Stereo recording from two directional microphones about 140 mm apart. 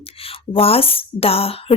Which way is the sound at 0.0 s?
45° left (ahead or behind).